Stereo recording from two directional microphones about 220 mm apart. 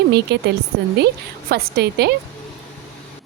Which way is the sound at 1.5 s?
45° right (ahead or behind).